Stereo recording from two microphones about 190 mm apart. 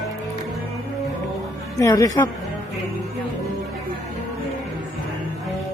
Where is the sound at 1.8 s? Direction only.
15° left (ahead or behind).